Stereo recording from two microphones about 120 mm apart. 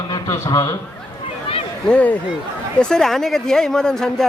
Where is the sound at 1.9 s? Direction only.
10° left (ahead or behind).